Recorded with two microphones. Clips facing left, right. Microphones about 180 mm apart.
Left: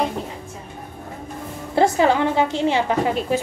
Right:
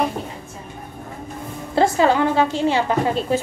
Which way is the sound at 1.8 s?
20° left (ahead or behind).